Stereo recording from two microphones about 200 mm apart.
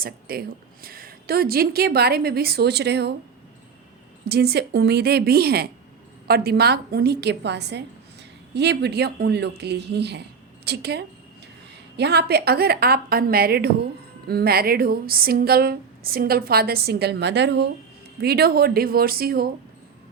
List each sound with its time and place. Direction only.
0.0 s speech: 50° right (ahead or behind)
4.3 s speech: 55° right (ahead or behind)